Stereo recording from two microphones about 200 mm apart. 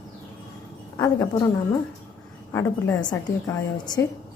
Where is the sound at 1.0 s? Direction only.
20° left (ahead or behind).